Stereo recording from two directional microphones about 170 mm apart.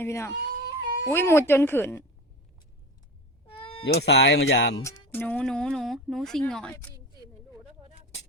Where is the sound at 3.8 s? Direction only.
85° left.